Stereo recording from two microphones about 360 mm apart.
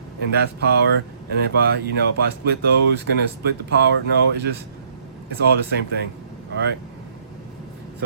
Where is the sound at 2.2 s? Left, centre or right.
Right.